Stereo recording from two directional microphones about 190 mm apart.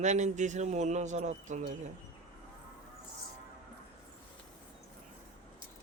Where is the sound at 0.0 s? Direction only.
40° right (ahead or behind).